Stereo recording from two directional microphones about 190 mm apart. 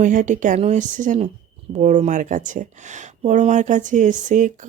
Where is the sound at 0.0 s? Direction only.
40° right (ahead or behind).